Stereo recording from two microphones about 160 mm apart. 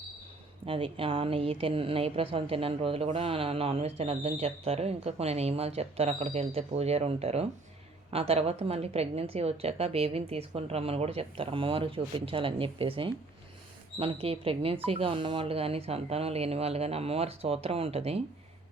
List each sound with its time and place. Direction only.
0.6 s speech: 35° right (ahead or behind)